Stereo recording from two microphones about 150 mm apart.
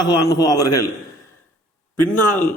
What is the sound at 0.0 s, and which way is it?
Speech, 25° left (ahead or behind).